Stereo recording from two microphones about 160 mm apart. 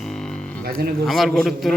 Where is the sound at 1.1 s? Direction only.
Centre (ahead or behind).